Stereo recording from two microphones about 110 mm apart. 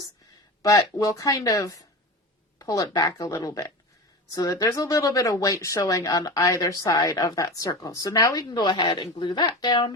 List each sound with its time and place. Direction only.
0.6 s speech: 30° left (ahead or behind)